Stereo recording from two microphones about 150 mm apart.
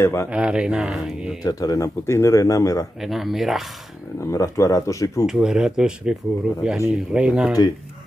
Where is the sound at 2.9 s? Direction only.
Centre (ahead or behind).